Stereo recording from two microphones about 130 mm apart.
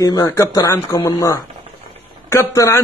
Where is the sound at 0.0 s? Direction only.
30° left (ahead or behind).